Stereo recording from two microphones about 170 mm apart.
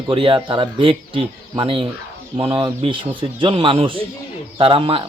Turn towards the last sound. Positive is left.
turn(degrees=-30)  # may be behind; listen again after turning